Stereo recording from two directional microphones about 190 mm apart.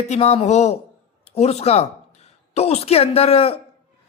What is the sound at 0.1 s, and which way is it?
A woman's voice, 35° left (ahead or behind).